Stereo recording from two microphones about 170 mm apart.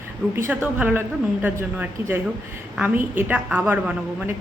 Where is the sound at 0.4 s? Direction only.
10° right (ahead or behind).